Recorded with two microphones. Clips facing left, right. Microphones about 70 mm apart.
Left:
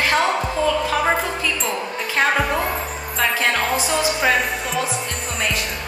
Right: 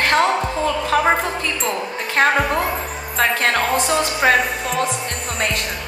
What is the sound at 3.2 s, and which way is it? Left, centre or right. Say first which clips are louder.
Music: right 2 dB; right.